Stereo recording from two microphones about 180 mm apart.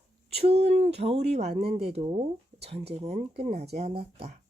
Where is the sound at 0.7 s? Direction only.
35° right (ahead or behind).